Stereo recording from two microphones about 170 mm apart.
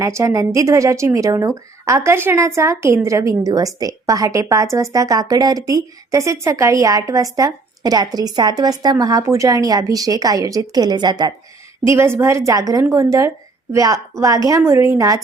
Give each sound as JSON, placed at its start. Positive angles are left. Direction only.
{"t": 0.0, "sound": "a woman's voice", "side_deg": -15}